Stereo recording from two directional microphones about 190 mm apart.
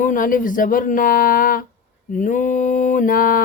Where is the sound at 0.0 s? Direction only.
45° left (ahead or behind).